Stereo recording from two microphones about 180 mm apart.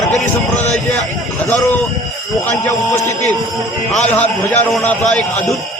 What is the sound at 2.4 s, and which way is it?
Speech, 15° left (ahead or behind).